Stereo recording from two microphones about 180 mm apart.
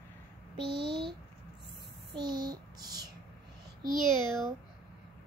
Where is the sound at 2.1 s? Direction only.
20° right (ahead or behind).